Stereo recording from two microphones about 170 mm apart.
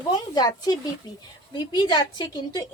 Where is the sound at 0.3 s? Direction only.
25° left (ahead or behind).